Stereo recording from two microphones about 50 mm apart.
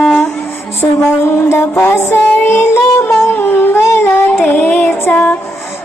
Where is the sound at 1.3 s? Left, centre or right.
Left.